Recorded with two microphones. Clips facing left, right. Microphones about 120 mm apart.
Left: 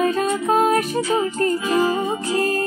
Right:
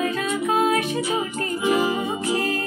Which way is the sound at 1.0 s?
15° right (ahead or behind).